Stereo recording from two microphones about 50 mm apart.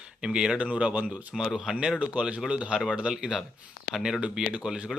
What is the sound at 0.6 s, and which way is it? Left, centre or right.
Speech, right.